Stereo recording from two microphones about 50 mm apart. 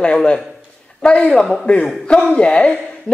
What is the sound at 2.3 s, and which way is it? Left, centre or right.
Speech, centre.